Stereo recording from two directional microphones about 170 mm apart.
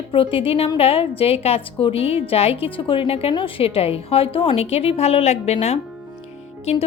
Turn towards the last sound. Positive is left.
turn(degrees=40)  # may be behind; listen again after turning